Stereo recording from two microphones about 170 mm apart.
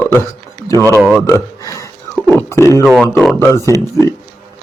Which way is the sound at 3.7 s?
15° left (ahead or behind).